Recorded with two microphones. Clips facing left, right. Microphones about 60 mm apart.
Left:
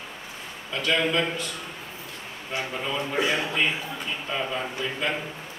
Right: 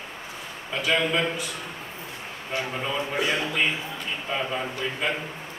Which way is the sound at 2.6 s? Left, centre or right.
Centre.